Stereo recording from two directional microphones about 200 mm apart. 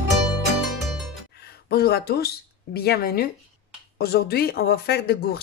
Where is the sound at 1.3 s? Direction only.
50° left (ahead or behind).